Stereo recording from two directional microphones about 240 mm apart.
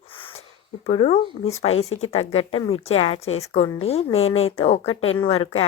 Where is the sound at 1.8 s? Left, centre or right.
Left.